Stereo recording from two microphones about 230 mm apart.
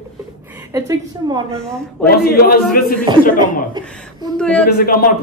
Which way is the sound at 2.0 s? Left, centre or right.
Left.